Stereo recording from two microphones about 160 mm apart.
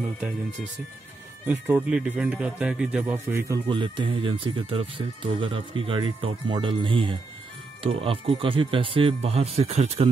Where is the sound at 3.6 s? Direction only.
30° right (ahead or behind).